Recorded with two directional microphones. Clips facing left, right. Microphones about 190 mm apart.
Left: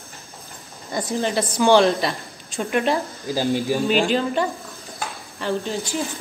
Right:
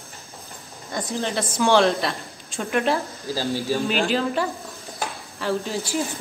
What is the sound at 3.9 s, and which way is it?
A woman's voice, centre (ahead or behind).